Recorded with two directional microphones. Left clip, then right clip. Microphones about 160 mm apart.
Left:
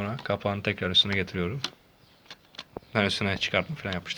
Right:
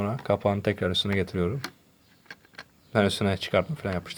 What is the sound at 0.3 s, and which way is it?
Speech, 30° right (ahead or behind).